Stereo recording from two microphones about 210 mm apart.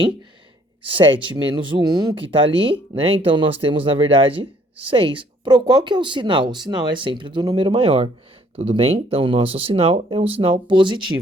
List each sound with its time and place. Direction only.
0.9 s speech: 25° right (ahead or behind)